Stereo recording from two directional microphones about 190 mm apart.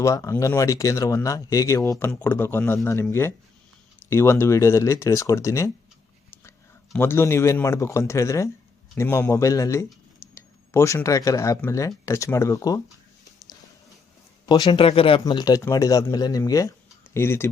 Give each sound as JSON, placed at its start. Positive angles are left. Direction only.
{"t": 0.0, "sound": "speech", "side_deg": 15}
{"t": 6.9, "sound": "speech", "side_deg": 10}
{"t": 10.3, "sound": "a sound", "side_deg": 15}
{"t": 11.3, "sound": "speech", "side_deg": 15}
{"t": 14.4, "sound": "a man's voice", "side_deg": 25}